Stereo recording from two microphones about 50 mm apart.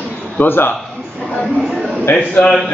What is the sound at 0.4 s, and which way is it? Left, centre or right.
Speech, left.